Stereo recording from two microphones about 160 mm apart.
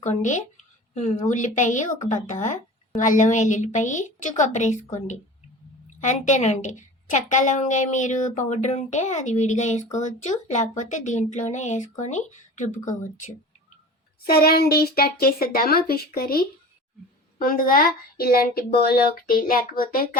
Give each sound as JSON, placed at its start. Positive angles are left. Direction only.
{"t": 0.0, "sound": "a woman's voice", "side_deg": 50}
{"t": 14.3, "sound": "speech", "side_deg": 75}